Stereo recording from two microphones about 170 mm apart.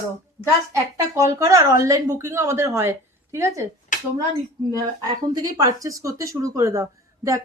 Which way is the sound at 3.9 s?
50° left (ahead or behind).